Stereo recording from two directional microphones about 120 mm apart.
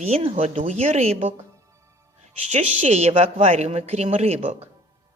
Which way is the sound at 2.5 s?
70° right (ahead or behind).